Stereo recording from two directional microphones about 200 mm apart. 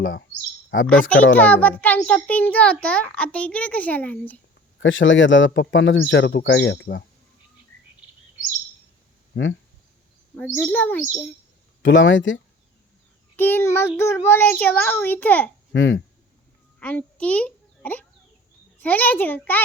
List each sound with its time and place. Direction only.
0.0 s speech: 75° left (ahead or behind)
1.4 s a child's voice: 10° left (ahead or behind)
4.8 s speech: 70° left (ahead or behind)
9.3 s speech: 65° left (ahead or behind)
10.3 s a child's voice: 5° left (ahead or behind)
11.8 s speech: 65° left (ahead or behind)
13.3 s a child's voice: 10° left (ahead or behind)
15.7 s speech: 70° left (ahead or behind)
16.8 s a child's voice: 5° left (ahead or behind)